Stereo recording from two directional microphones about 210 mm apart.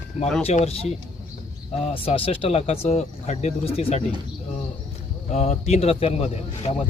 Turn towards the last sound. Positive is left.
turn(degrees=30)  # may be behind; listen again after turning